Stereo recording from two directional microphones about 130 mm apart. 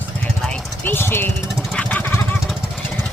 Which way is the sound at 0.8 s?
20° left (ahead or behind).